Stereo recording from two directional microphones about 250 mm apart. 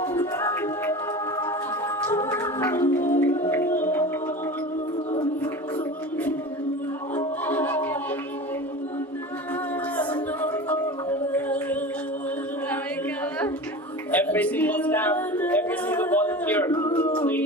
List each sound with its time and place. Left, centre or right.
0.0 s music: centre
2.0 s music: centre
5.1 s music: centre
7.2 s music: centre
10.4 s singing: centre
14.1 s singing: centre